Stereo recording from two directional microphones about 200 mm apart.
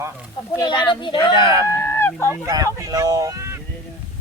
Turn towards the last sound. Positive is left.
turn(degrees=-15)  # may be behind; listen again after turning